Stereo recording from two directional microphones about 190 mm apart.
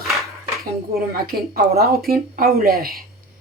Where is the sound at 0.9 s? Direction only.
50° right (ahead or behind).